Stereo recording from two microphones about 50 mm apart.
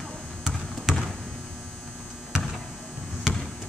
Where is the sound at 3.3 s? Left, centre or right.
Centre.